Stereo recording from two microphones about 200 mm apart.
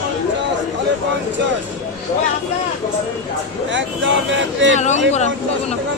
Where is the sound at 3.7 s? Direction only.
70° right (ahead or behind).